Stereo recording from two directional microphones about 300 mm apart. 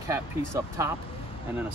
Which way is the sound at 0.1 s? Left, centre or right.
Centre.